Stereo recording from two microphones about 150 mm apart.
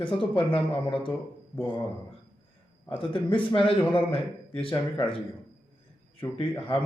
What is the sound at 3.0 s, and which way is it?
A man's voice, 35° left (ahead or behind).